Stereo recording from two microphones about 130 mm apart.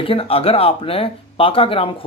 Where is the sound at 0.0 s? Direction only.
45° left (ahead or behind).